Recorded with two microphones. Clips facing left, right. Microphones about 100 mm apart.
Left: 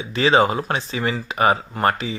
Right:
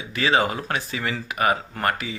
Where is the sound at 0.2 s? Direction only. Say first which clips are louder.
Left 5 dB; 25° left (ahead or behind).